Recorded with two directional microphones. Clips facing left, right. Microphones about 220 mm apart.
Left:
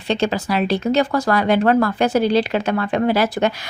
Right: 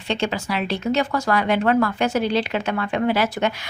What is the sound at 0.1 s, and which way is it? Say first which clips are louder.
Speech: left 4 dB; 35° left (ahead or behind).